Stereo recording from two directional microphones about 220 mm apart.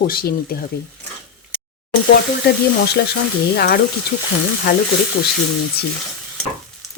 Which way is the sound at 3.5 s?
45° left (ahead or behind).